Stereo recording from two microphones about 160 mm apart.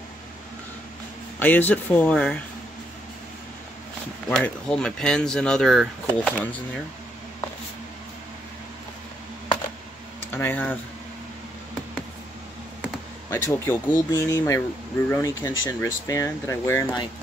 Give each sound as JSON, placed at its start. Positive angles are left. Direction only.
{"t": 1.4, "sound": "speech", "side_deg": 10}
{"t": 4.3, "sound": "speech", "side_deg": 5}
{"t": 10.3, "sound": "speech", "side_deg": 10}
{"t": 13.3, "sound": "speech", "side_deg": 15}